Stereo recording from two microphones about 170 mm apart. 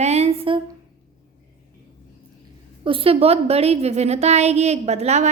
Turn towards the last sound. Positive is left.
turn(degrees=-40)  # may be behind; listen again after turning